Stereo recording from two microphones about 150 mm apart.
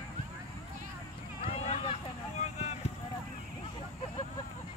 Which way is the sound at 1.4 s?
40° left (ahead or behind).